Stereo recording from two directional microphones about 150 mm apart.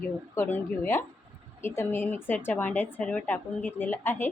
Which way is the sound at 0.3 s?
10° left (ahead or behind).